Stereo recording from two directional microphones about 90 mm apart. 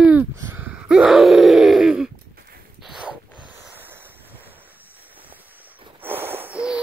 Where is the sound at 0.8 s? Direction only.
5° right (ahead or behind).